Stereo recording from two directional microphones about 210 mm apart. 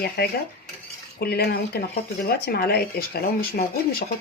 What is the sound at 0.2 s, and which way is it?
Speech, 45° left (ahead or behind).